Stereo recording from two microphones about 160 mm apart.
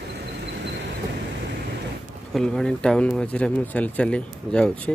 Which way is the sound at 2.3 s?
5° left (ahead or behind).